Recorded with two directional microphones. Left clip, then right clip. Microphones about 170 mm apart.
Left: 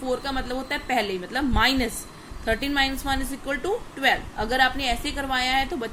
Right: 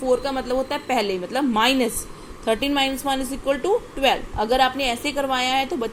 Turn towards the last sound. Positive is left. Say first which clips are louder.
# right 2 dB
turn(degrees=-10)  # may be behind; listen again after turning